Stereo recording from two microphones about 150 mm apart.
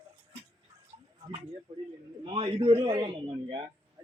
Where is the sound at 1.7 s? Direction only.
45° right (ahead or behind).